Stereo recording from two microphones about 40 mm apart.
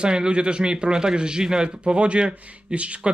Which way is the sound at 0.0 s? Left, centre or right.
Right.